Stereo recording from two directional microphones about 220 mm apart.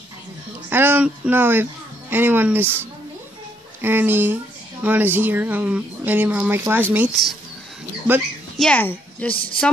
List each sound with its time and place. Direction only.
0.7 s speech: 10° right (ahead or behind)
8.5 s a child's voice: 5° left (ahead or behind)
9.3 s speech: 25° left (ahead or behind)